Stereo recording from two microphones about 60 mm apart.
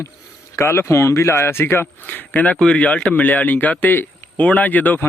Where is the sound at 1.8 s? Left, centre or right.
Left.